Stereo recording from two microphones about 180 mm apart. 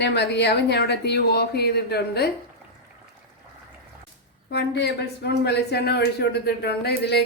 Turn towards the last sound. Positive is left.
turn(degrees=65)  # may be behind; listen again after turning